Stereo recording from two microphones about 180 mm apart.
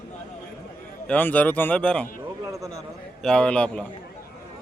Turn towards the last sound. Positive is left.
turn(degrees=5)  # may be behind; listen again after turning